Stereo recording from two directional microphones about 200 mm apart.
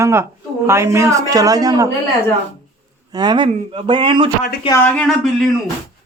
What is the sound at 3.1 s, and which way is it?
Speech, 20° right (ahead or behind).